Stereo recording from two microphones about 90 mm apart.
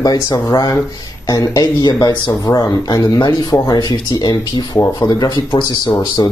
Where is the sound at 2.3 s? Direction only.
40° left (ahead or behind).